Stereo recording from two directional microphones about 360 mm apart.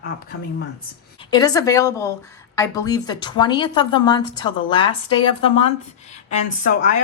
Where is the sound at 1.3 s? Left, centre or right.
Centre.